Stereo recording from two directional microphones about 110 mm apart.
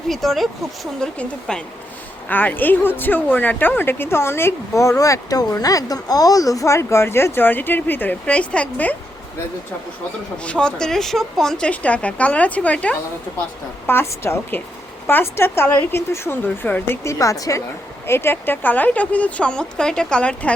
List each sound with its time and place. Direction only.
0.1 s a woman's voice: centre (ahead or behind)
10.3 s a woman's voice: 10° left (ahead or behind)
17.0 s a woman's voice: 30° left (ahead or behind); by 20.5 s 10° left (ahead or behind)